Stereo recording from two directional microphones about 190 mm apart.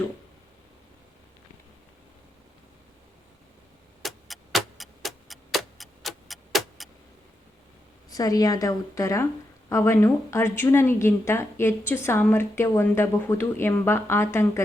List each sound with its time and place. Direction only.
4.0 s clock: centre (ahead or behind)
8.1 s a woman's voice: 20° left (ahead or behind)